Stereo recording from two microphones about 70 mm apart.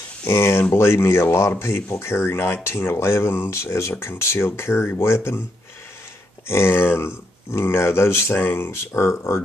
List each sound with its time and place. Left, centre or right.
0.2 s speech: left
6.4 s speech: left